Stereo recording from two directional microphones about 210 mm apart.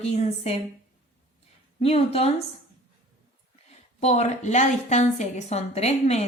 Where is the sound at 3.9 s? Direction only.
30° left (ahead or behind).